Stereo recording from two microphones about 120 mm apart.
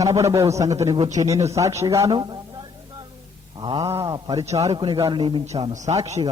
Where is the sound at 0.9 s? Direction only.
65° right (ahead or behind).